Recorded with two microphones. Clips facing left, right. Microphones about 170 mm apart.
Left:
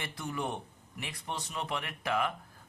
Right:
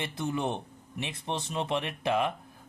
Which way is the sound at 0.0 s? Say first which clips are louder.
Right 5 dB; 25° right (ahead or behind).